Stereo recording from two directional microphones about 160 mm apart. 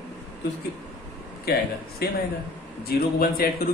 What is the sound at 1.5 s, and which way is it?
Speech, 90° left.